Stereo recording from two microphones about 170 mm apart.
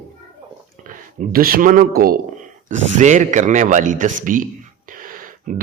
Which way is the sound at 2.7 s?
45° right (ahead or behind).